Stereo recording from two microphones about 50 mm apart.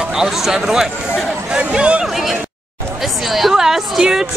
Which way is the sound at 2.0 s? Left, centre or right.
Centre.